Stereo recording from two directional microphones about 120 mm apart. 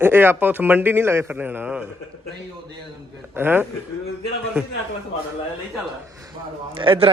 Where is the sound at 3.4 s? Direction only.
20° right (ahead or behind).